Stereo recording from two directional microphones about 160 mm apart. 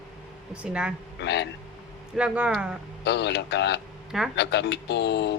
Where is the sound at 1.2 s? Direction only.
90° left.